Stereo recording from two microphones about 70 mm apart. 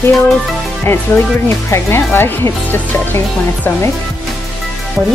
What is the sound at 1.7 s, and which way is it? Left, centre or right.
Speech, left.